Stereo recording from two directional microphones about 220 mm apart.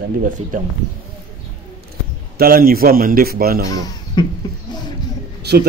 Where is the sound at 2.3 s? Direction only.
40° right (ahead or behind).